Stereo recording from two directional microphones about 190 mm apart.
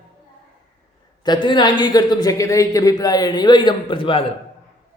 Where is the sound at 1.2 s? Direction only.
25° left (ahead or behind).